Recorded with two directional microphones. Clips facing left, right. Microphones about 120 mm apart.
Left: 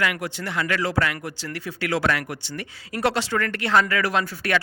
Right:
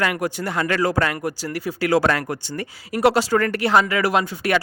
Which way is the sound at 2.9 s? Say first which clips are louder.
Right 6 dB; 30° right (ahead or behind).